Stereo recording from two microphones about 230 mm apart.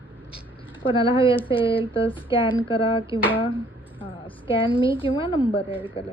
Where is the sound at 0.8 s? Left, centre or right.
Left.